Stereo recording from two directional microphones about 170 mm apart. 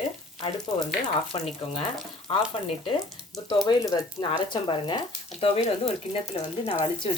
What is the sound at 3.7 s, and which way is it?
Speech, 25° left (ahead or behind).